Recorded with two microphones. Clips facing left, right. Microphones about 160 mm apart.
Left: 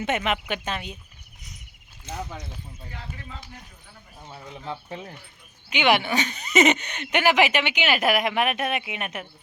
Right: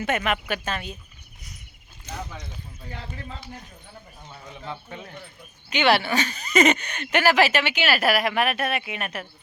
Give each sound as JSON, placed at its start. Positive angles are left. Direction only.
{"t": 0.0, "sound": "speech", "side_deg": 20}
{"t": 4.6, "sound": "speech", "side_deg": 30}
{"t": 5.7, "sound": "speech", "side_deg": 15}